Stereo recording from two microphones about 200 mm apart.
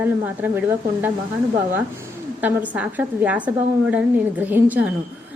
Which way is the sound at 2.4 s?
10° right (ahead or behind).